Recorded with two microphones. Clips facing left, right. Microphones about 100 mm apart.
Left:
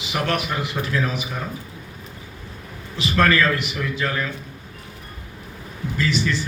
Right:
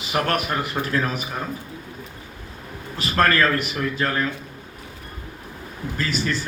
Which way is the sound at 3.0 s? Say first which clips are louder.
Left 1 dB; 45° right (ahead or behind).